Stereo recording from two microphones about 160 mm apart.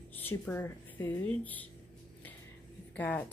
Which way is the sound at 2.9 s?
10° left (ahead or behind).